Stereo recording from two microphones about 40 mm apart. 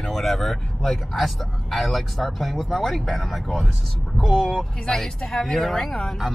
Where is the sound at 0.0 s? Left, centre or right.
Centre.